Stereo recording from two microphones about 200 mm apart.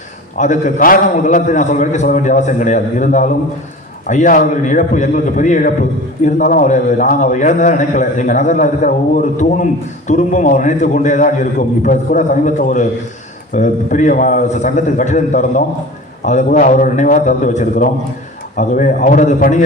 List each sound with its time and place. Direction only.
0.3 s a man's voice: 40° left (ahead or behind)